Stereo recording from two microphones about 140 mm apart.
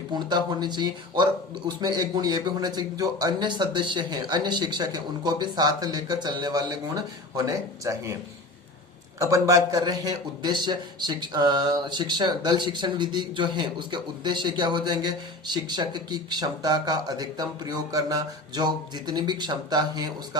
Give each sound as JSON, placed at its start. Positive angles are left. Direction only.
{"t": 0.1, "sound": "speech", "side_deg": -30}
{"t": 9.1, "sound": "a man's voice", "side_deg": -25}